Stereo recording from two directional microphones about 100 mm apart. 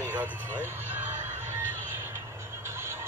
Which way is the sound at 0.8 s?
20° right (ahead or behind).